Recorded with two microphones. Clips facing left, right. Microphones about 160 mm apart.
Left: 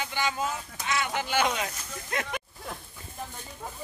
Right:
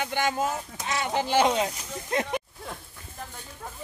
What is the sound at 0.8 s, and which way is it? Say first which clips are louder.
Speech: right 2 dB; 35° right (ahead or behind).